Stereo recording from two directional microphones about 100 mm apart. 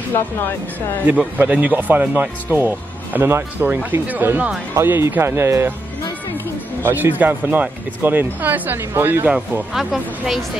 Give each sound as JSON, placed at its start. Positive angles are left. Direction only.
{"t": 1.4, "sound": "speech", "side_deg": -15}
{"t": 6.8, "sound": "speech", "side_deg": -20}
{"t": 9.3, "sound": "speech", "side_deg": 0}